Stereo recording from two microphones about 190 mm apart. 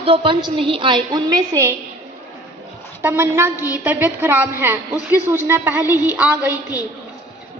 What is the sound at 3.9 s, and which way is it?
A woman's voice, 10° right (ahead or behind).